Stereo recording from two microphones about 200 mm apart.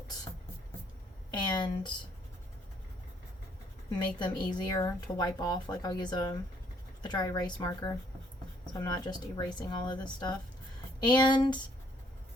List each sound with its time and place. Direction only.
1.3 s a woman's voice: 20° left (ahead or behind)
3.9 s a woman's voice: 20° left (ahead or behind)